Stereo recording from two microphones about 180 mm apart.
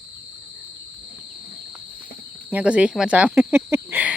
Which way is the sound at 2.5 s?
5° right (ahead or behind).